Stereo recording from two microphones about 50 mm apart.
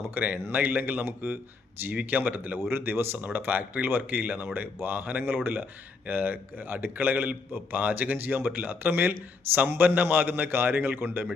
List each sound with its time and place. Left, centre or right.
0.0 s a man's voice: right
2.6 s a man's voice: right